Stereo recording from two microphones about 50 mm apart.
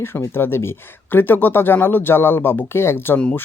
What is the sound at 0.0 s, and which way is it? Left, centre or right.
Speech, left.